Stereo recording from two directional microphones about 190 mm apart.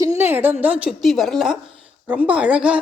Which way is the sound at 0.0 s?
15° right (ahead or behind).